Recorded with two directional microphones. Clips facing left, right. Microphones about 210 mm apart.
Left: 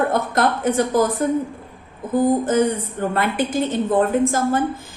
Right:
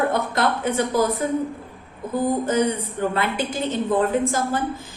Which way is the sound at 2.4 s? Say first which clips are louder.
Left 3 dB; 50° left (ahead or behind).